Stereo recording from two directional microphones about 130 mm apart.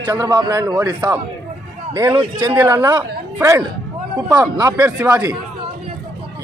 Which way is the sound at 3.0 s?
25° right (ahead or behind).